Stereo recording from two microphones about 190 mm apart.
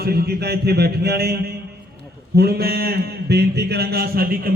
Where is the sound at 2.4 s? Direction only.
55° right (ahead or behind).